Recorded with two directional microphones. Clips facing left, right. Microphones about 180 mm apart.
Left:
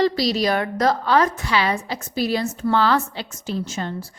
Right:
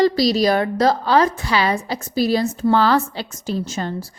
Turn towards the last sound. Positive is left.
turn(degrees=-40)  # may be behind; listen again after turning